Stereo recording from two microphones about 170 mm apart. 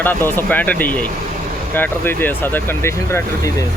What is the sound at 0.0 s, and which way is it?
Speech, 10° left (ahead or behind).